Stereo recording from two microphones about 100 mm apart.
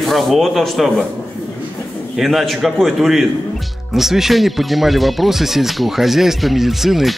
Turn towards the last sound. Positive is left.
turn(degrees=0)  # may be behind; listen again after turning